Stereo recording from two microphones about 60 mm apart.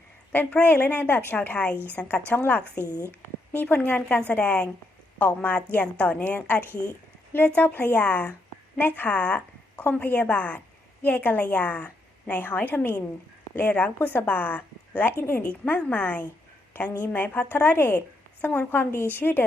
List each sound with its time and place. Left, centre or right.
0.5 s a woman's voice: left
2.8 s a woman's voice: left
15.4 s a woman's voice: left
18.8 s a woman's voice: left